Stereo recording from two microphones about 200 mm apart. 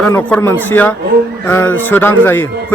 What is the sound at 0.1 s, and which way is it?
A man's voice, 10° left (ahead or behind).